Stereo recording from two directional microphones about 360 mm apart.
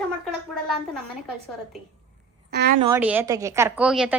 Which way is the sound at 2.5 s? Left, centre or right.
Right.